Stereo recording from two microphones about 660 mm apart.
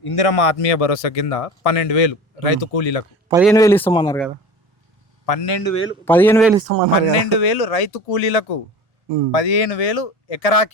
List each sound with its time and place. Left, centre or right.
0.0 s a man's voice: left
3.2 s a man's voice: centre
5.2 s a man's voice: left
5.6 s speech: left
6.1 s a man's voice: centre
6.7 s speech: right
7.2 s a man's voice: left